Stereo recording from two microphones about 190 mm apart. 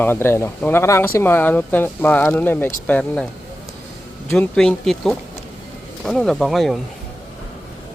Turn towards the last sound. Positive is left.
turn(degrees=0)  # may be behind; listen again after turning